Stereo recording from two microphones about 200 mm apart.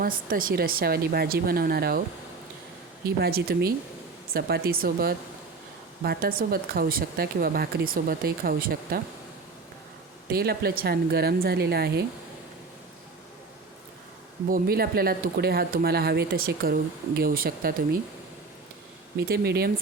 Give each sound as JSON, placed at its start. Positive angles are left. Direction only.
{"t": 0.0, "sound": "speech", "side_deg": -45}
{"t": 3.2, "sound": "speech", "side_deg": -50}
{"t": 10.3, "sound": "speech", "side_deg": -50}
{"t": 14.5, "sound": "speech", "side_deg": -50}
{"t": 19.1, "sound": "speech", "side_deg": -55}